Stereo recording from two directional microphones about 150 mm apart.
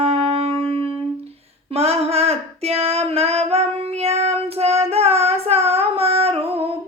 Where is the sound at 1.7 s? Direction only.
40° right (ahead or behind).